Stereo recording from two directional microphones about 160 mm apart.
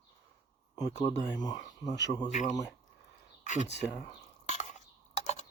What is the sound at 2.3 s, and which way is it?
Speech, 50° left (ahead or behind).